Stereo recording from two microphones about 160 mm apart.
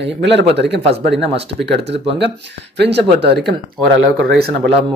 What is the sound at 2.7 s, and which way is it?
Speech, 90° right.